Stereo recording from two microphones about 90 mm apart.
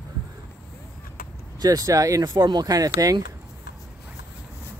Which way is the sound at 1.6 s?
45° right (ahead or behind).